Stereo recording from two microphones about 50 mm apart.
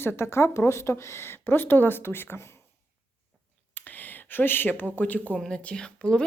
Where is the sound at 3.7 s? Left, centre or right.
Left.